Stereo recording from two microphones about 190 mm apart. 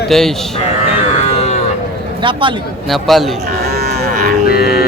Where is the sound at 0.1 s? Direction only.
Centre (ahead or behind).